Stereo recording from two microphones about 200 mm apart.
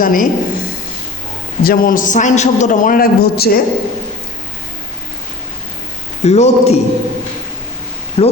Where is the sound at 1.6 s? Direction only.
45° left (ahead or behind).